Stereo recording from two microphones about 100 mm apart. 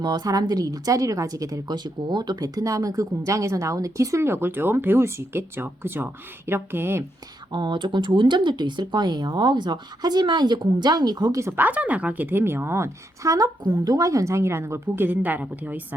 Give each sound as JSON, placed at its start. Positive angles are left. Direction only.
{"t": 0.0, "sound": "a woman's voice", "side_deg": -40}
{"t": 7.5, "sound": "speech", "side_deg": -55}
{"t": 11.3, "sound": "a woman's voice", "side_deg": -30}
{"t": 11.6, "sound": "a woman's voice", "side_deg": -15}